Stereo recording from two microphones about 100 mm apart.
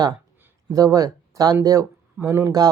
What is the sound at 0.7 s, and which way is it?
Speech, 35° right (ahead or behind).